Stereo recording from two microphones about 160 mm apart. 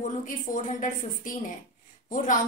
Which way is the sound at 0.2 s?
55° left (ahead or behind).